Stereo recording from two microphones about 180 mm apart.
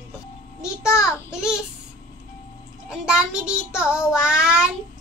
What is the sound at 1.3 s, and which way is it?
Speech, 5° right (ahead or behind).